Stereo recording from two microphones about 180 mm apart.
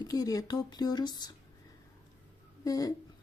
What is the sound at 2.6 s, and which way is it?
Speech, 20° left (ahead or behind).